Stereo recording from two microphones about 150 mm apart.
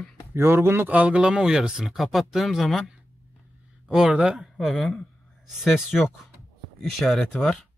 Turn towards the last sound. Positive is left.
turn(degrees=0)  # may be behind; listen again after turning